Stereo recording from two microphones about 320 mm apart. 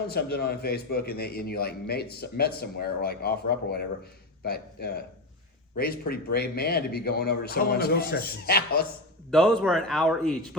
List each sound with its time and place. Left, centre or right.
0.1 s speech: left
9.3 s a man's voice: centre